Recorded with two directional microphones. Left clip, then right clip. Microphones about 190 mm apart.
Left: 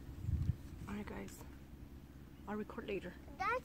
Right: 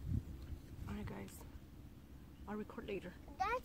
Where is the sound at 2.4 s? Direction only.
Centre (ahead or behind).